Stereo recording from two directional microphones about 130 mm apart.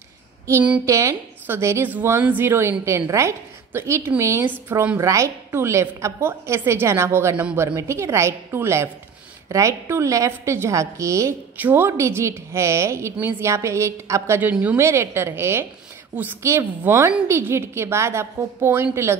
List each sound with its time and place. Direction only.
0.5 s a woman's voice: 15° right (ahead or behind)
14.8 s a woman's voice: 20° right (ahead or behind)